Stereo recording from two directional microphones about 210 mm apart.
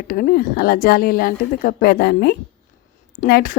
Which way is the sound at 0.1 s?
45° left (ahead or behind).